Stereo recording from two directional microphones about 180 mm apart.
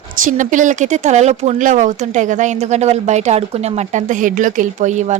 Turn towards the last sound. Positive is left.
turn(degrees=-40)  # may be behind; listen again after turning